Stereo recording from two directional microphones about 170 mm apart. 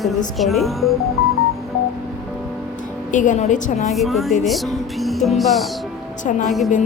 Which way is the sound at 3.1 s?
45° left (ahead or behind).